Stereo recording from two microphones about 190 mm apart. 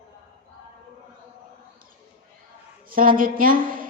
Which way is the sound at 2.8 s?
45° right (ahead or behind).